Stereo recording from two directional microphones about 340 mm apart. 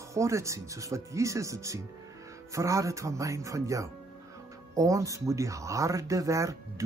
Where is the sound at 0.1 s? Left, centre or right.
Centre.